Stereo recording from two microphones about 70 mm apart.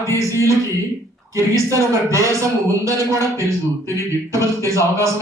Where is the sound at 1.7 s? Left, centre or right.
Right.